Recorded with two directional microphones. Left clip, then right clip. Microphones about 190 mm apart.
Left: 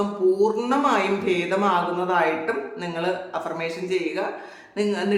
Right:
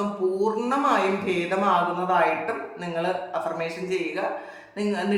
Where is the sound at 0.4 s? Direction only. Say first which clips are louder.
Left 2 dB; 25° left (ahead or behind).